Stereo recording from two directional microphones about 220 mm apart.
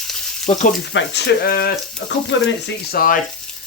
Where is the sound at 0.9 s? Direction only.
50° left (ahead or behind).